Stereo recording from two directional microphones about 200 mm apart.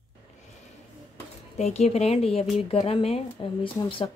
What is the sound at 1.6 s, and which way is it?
Speech, 35° left (ahead or behind).